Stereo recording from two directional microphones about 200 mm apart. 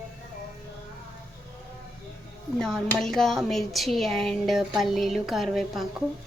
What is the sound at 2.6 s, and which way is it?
A woman's voice, 5° left (ahead or behind).